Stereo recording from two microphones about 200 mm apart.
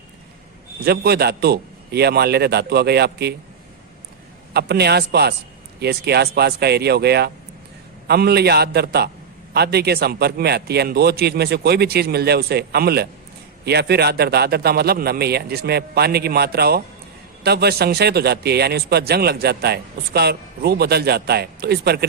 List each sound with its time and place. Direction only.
0.9 s a man's voice: 55° right (ahead or behind)
4.5 s a man's voice: 55° right (ahead or behind)